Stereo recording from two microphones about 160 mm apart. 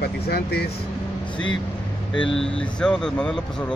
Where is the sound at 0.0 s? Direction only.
80° left.